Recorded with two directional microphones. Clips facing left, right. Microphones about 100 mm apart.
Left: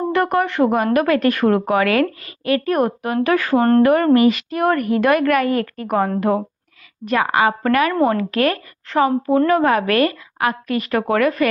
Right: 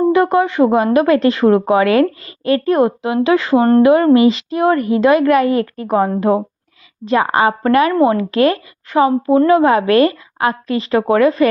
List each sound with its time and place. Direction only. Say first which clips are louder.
0.1 s speech: right 5 dB; 15° right (ahead or behind)
7.9 s speech: right 4 dB; 15° right (ahead or behind)